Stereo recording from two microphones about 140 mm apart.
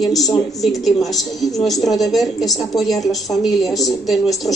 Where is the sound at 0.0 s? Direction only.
Centre (ahead or behind).